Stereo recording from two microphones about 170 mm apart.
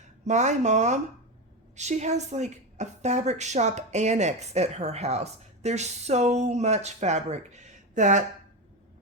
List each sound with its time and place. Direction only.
0.0 s a woman's voice: 45° right (ahead or behind)